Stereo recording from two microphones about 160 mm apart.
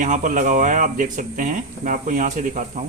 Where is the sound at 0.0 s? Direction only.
55° right (ahead or behind).